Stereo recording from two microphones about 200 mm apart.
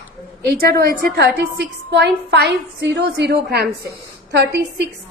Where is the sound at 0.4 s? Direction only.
55° right (ahead or behind).